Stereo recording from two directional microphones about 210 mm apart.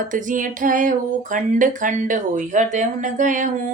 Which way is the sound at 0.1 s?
40° right (ahead or behind).